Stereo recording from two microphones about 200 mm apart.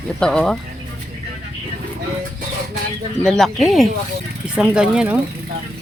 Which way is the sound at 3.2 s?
Centre (ahead or behind).